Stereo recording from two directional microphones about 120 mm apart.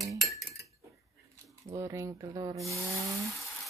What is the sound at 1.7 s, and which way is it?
Cutlery, 25° right (ahead or behind).